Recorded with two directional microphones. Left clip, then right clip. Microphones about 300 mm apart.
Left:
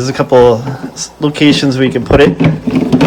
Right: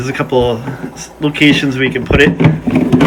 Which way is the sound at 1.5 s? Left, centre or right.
Centre.